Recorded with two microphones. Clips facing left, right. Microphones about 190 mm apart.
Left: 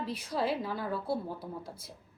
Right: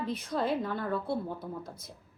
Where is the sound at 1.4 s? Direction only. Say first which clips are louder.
Right 2 dB; 30° left (ahead or behind).